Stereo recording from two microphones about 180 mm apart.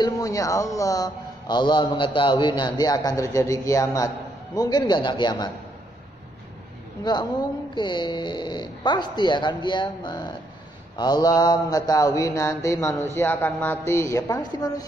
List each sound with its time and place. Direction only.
0.0 s a man's voice: 20° left (ahead or behind)
7.1 s a man's voice: 25° left (ahead or behind)